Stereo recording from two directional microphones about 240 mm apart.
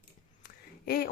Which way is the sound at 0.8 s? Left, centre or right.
Left.